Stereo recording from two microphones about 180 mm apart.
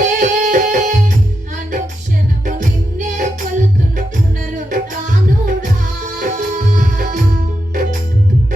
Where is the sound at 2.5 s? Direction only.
45° right (ahead or behind).